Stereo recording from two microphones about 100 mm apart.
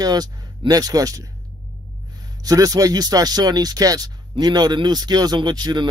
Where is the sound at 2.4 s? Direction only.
35° right (ahead or behind).